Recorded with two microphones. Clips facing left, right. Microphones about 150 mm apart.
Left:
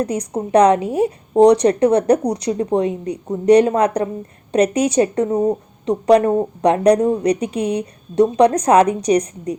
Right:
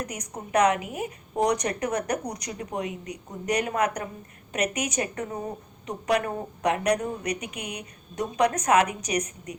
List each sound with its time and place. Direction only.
0.0 s a woman's voice: 30° left (ahead or behind)